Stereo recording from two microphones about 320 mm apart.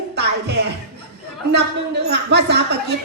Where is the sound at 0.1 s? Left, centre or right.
Right.